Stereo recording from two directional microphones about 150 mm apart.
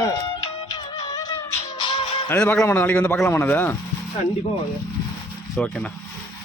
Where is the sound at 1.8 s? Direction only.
35° left (ahead or behind).